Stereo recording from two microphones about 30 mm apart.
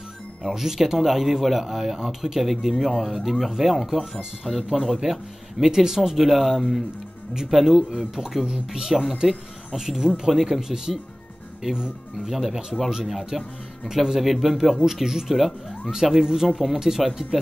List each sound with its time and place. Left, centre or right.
0.5 s speech: centre
2.4 s speech: centre
8.5 s speech: centre
10.3 s speech: centre
10.9 s speech: centre
12.3 s speech: centre
13.3 s speech: centre
13.8 s speech: centre
16.4 s speech: centre
16.8 s speech: centre